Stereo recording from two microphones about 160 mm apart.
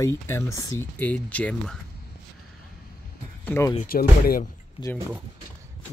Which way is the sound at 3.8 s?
60° left (ahead or behind).